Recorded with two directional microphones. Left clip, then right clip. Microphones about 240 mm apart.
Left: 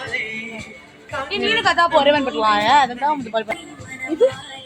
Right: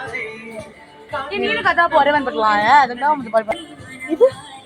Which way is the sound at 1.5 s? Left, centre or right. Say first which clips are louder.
Right 1 dB; centre.